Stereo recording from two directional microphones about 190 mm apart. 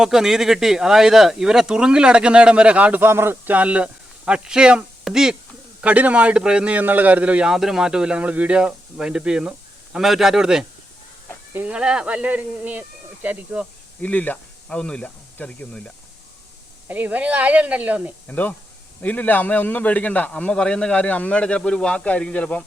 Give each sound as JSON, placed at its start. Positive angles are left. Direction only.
{"t": 0.0, "sound": "speech", "side_deg": 0}
{"t": 14.0, "sound": "speech", "side_deg": 10}
{"t": 16.9, "sound": "speech", "side_deg": -10}
{"t": 18.3, "sound": "a man's voice", "side_deg": 10}